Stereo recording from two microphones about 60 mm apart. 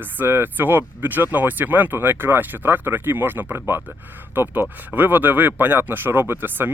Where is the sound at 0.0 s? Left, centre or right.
Right.